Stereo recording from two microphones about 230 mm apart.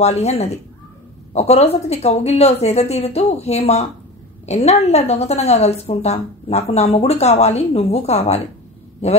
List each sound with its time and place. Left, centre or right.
0.0 s a woman's voice: left